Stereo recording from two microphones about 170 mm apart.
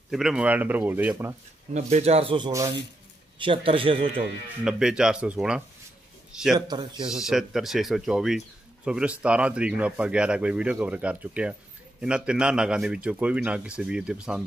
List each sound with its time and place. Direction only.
0.1 s speech: 5° right (ahead or behind)
1.7 s speech: 45° right (ahead or behind)
4.6 s a man's voice: 5° right (ahead or behind)
6.7 s speech: 30° right (ahead or behind)
7.1 s a man's voice: 5° right (ahead or behind)